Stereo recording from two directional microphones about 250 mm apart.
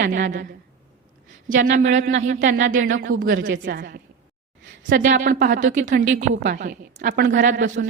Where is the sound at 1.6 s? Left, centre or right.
Right.